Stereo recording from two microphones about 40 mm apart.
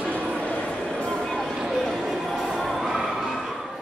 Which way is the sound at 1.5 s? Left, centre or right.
Centre.